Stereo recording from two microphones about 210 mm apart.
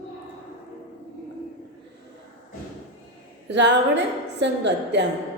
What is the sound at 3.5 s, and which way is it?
A woman's voice, 55° right (ahead or behind).